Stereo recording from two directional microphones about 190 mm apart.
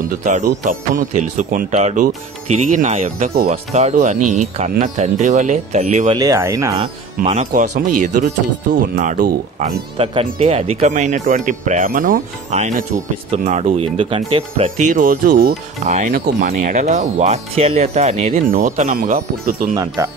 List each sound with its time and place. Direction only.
0.1 s speech: 40° right (ahead or behind)
6.0 s speech: 20° right (ahead or behind)
7.2 s speech: 40° right (ahead or behind)
9.9 s speech: 30° right (ahead or behind)
16.1 s speech: 55° right (ahead or behind)
16.6 s speech: 40° right (ahead or behind)
19.7 s speech: 20° right (ahead or behind)